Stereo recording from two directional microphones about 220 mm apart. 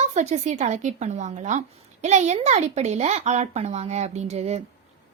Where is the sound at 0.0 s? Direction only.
30° right (ahead or behind).